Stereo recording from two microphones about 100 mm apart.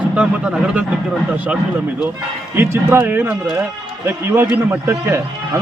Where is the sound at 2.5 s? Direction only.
25° right (ahead or behind).